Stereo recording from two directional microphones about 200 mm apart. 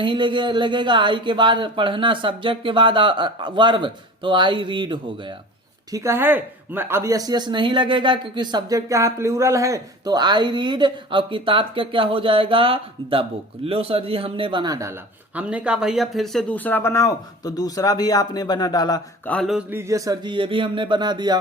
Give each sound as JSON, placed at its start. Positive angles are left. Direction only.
{"t": 0.0, "sound": "speech", "side_deg": -25}
{"t": 5.9, "sound": "speech", "side_deg": -15}
{"t": 15.4, "sound": "speech", "side_deg": -5}
{"t": 19.3, "sound": "a sound", "side_deg": 0}
{"t": 19.7, "sound": "speech", "side_deg": -15}